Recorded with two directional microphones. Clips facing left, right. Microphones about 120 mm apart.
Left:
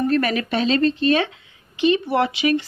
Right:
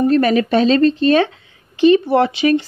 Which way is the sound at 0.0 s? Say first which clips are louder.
Right 6 dB; 30° right (ahead or behind).